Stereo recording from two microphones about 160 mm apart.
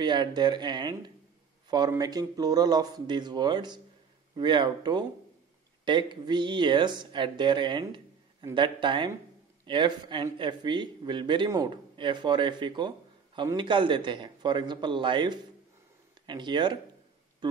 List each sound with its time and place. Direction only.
0.0 s speech: 25° right (ahead or behind)